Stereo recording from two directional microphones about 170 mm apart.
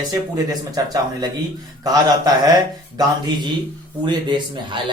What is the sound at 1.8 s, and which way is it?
Speech, 25° right (ahead or behind).